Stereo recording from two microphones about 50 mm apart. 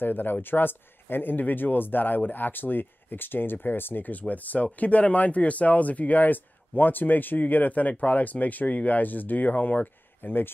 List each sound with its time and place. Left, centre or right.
0.0 s speech: left